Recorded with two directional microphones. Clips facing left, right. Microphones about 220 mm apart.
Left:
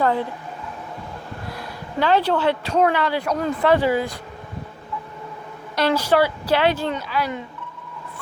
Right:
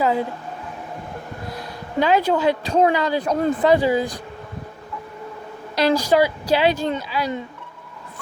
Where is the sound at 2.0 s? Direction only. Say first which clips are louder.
Right 1 dB; 10° right (ahead or behind); by 3.7 s 25° right (ahead or behind).